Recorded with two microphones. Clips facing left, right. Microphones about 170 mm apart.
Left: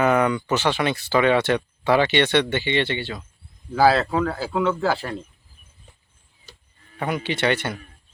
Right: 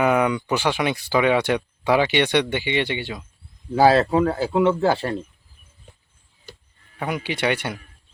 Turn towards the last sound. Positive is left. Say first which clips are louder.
# left 1 dB
turn(degrees=-10)  # may be behind; listen again after turning